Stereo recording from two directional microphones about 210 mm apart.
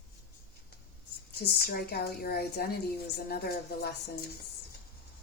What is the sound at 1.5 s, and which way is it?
A woman's voice, 45° left (ahead or behind).